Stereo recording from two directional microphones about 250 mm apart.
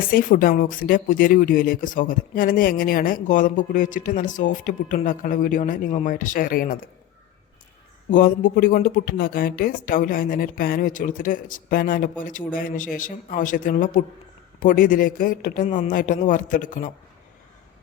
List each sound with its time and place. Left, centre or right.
0.1 s speech: left
8.1 s speech: left